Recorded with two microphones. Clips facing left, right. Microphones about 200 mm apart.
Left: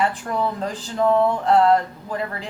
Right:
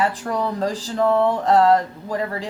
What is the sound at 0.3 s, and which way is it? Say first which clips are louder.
A woman's voice: right 2 dB; 35° right (ahead or behind).